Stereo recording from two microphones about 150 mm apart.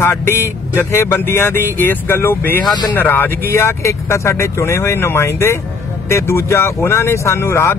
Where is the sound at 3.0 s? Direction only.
15° left (ahead or behind).